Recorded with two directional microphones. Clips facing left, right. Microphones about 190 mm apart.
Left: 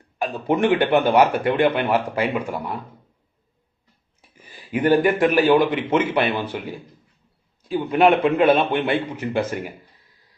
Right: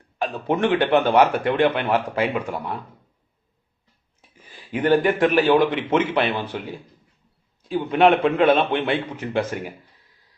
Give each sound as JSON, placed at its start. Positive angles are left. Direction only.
{"t": 0.2, "sound": "speech", "side_deg": 10}
{"t": 4.5, "sound": "speech", "side_deg": 10}
{"t": 7.6, "sound": "a man's voice", "side_deg": 5}